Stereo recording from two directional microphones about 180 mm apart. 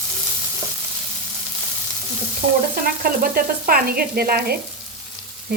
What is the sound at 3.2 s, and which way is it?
Frying, 55° right (ahead or behind).